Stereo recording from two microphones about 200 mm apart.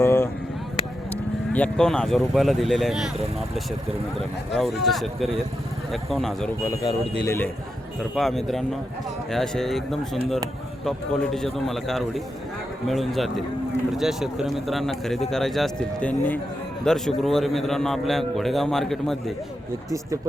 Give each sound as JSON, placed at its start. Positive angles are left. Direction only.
{"t": 0.0, "sound": "a sound", "side_deg": 10}
{"t": 1.1, "sound": "speech", "side_deg": 5}
{"t": 4.2, "sound": "a man's voice", "side_deg": 0}
{"t": 6.7, "sound": "a man's voice", "side_deg": 20}